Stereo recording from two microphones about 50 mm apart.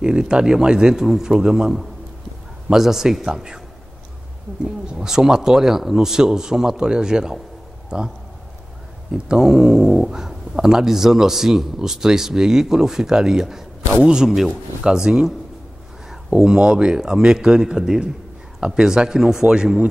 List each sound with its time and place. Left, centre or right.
0.0 s speech: centre
2.7 s speech: centre
4.6 s speech: centre
9.1 s speech: centre